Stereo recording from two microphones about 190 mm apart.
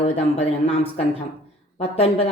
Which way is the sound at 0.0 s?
30° left (ahead or behind).